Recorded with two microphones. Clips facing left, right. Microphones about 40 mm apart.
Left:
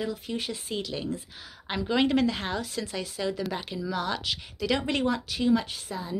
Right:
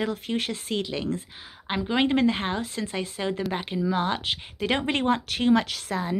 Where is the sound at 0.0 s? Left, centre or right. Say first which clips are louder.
Right 4 dB; right.